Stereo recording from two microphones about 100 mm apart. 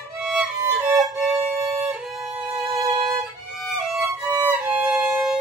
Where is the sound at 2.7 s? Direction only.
30° right (ahead or behind).